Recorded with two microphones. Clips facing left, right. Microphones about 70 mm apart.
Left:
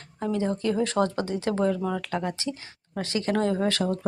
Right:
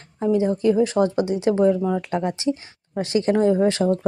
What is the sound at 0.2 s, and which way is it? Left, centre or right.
Speech, centre.